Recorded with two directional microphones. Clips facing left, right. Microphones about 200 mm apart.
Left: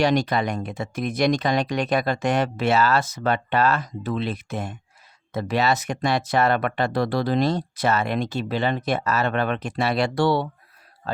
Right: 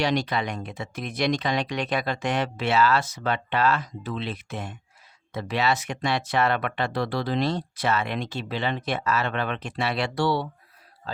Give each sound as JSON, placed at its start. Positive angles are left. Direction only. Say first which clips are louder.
{"t": 0.0, "sound": "speech", "louder": "left 4 dB", "side_deg": 45}